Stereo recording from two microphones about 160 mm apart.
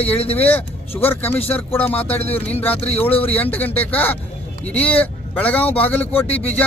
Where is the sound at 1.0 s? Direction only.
15° left (ahead or behind).